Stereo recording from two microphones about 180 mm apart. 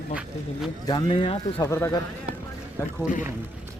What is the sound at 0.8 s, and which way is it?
Speech, 25° left (ahead or behind).